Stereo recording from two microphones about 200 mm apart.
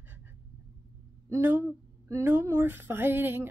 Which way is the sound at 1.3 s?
15° right (ahead or behind).